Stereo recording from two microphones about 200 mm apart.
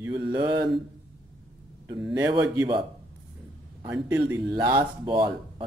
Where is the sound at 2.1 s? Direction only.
15° right (ahead or behind).